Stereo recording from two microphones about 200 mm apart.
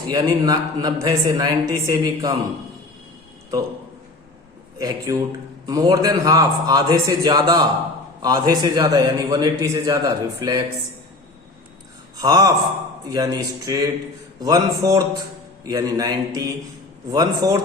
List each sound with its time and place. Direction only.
0.1 s a man's voice: 20° right (ahead or behind)
4.8 s a man's voice: 20° right (ahead or behind)
12.1 s gasp: 20° right (ahead or behind)
13.1 s speech: 20° right (ahead or behind)